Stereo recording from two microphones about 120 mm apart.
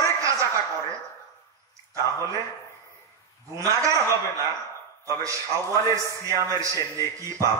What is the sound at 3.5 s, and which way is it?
A man's voice, 25° right (ahead or behind).